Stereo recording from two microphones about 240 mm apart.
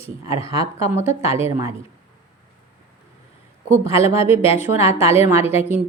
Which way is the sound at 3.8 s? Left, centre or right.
Left.